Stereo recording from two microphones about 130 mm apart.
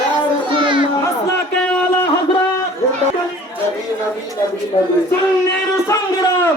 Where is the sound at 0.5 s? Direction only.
40° right (ahead or behind).